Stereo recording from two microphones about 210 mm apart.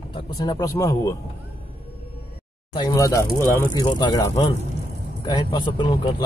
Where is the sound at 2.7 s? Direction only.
15° left (ahead or behind).